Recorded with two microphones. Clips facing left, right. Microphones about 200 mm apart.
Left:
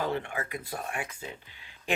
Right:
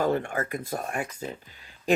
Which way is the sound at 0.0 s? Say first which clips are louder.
Right 6 dB; 45° right (ahead or behind).